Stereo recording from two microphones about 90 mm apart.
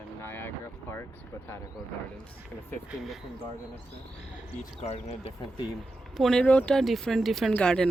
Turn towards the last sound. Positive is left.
turn(degrees=10)  # may be behind; listen again after turning